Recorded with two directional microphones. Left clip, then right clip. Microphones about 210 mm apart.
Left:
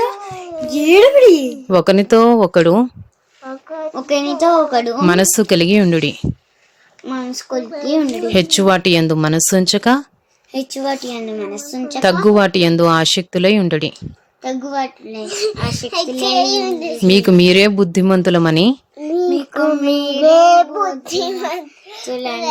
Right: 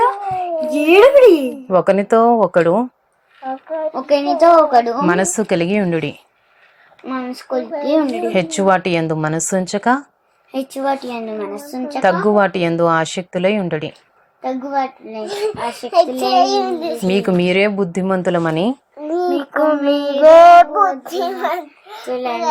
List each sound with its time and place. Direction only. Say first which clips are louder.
0.0 s a sound: right 4 dB; 20° left (ahead or behind)
1.7 s speech: left 2 dB; 45° left (ahead or behind)
4.3 s child singing: right 4 dB; 25° left (ahead or behind)
5.0 s speech: left 3 dB; 45° left (ahead or behind)
7.1 s child singing: even; 25° left (ahead or behind)
8.3 s speech: left 3 dB; 45° left (ahead or behind)
10.5 s child singing: right 1 dB; 15° left (ahead or behind)
12.4 s speech: left 2 dB; 45° left (ahead or behind)
14.4 s child singing: right 1 dB; 20° left (ahead or behind)
17.1 s speech: left 6 dB; 50° left (ahead or behind)
18.9 s a sound: left 1 dB; 20° left (ahead or behind)
19.4 s child singing: right 1 dB; 25° left (ahead or behind)
20.4 s child singing: right 4 dB; 15° left (ahead or behind)